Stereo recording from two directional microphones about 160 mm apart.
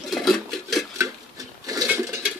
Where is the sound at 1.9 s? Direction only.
10° right (ahead or behind).